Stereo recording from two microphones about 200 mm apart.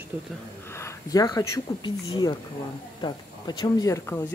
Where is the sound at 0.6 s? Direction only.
15° left (ahead or behind).